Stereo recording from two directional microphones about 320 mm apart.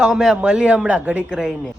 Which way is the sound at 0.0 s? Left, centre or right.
Centre.